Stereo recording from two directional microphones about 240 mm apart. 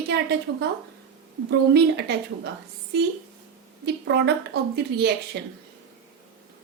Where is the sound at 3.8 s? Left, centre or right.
Right.